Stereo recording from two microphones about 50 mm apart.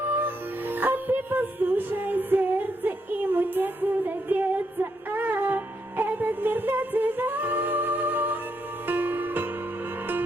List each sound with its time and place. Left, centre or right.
0.0 s music: right